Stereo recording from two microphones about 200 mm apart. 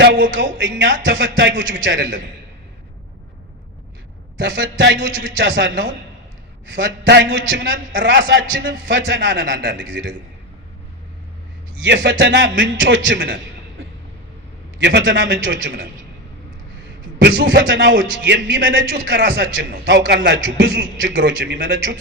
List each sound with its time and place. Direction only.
0.0 s speech: 60° right (ahead or behind)
4.4 s speech: 65° right (ahead or behind)
7.0 s a man's voice: 55° right (ahead or behind)
11.8 s a man's voice: 60° right (ahead or behind)
14.8 s a man's voice: 60° right (ahead or behind)
17.2 s a man's voice: 60° right (ahead or behind)